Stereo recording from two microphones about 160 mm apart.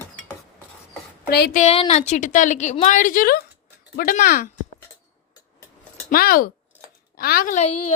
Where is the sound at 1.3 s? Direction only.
80° left.